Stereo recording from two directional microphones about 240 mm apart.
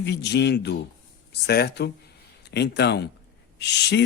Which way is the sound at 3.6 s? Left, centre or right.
Left.